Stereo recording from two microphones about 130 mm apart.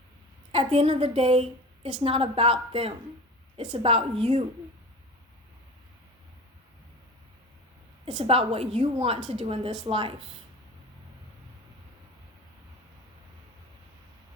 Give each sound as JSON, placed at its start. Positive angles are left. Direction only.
{"t": 0.5, "sound": "a woman's voice", "side_deg": -50}
{"t": 8.0, "sound": "a woman's voice", "side_deg": -40}